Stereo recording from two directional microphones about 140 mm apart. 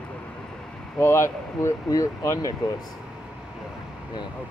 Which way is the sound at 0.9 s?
20° left (ahead or behind).